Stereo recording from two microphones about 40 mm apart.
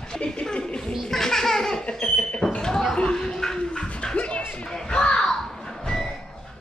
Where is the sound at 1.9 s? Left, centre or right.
Left.